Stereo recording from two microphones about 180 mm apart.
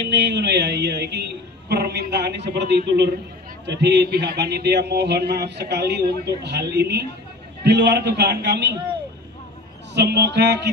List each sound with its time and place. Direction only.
0.0 s a man's voice: 70° right (ahead or behind)
9.9 s a man's voice: 70° right (ahead or behind)